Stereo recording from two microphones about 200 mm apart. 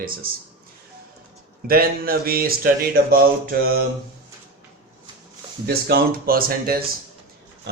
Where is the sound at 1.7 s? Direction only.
50° right (ahead or behind).